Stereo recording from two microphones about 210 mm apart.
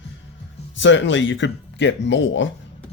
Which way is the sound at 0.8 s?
60° left (ahead or behind).